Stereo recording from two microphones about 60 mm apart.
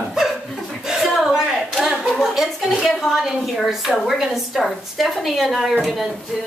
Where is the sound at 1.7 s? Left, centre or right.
Centre.